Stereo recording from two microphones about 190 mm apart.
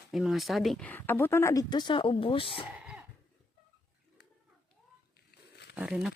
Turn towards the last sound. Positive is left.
turn(degrees=-5)  # may be behind; listen again after turning